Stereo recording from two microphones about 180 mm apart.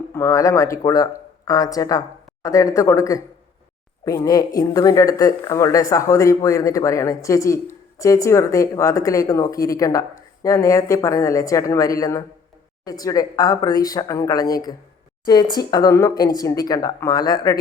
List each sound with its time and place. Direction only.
0.1 s speech: 15° left (ahead or behind)